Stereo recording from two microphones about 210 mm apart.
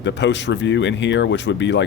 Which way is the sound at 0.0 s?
55° left (ahead or behind).